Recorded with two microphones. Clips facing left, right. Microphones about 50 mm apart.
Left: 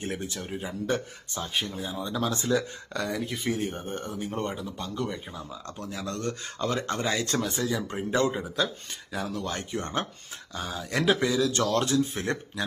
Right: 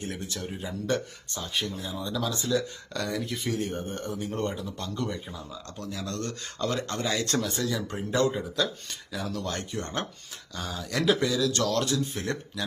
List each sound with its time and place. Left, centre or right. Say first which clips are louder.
0.0 s speech: left 2 dB; left
0.3 s speech: left 1 dB; centre
1.8 s speech: left 1 dB; left
2.9 s speech: left 1 dB; centre
3.2 s speech: left 1 dB; centre
5.3 s speech: left 1 dB; left
6.1 s speech: left 1 dB; centre
7.3 s speech: even; centre
9.4 s speech: left 1 dB; centre
10.9 s speech: left 1 dB; left